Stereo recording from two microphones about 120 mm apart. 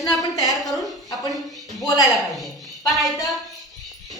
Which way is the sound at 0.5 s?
Centre (ahead or behind).